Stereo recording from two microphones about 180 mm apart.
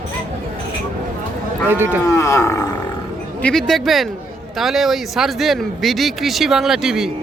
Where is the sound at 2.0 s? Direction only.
15° left (ahead or behind).